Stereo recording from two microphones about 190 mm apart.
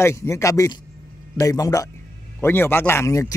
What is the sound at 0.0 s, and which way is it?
A man's voice, 15° left (ahead or behind).